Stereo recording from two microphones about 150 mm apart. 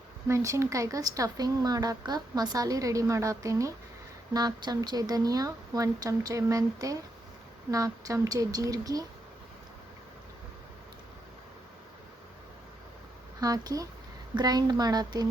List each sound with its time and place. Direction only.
0.3 s speech: 20° right (ahead or behind)
13.4 s speech: 25° right (ahead or behind)